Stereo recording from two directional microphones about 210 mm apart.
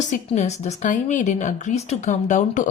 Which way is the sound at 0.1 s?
35° left (ahead or behind).